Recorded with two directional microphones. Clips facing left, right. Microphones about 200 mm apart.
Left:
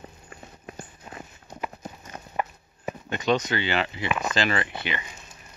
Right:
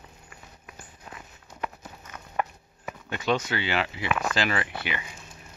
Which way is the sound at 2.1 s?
30° left (ahead or behind).